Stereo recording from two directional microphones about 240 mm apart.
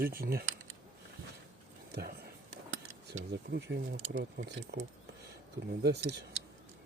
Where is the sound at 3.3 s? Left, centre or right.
Right.